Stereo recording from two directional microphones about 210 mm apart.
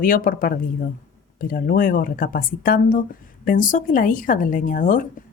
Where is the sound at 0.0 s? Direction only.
40° left (ahead or behind).